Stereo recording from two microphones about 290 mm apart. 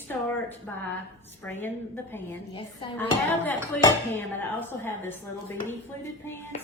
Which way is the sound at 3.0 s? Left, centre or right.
Centre.